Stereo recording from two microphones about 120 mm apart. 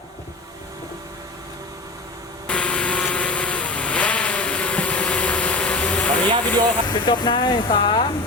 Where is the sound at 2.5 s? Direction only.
10° left (ahead or behind).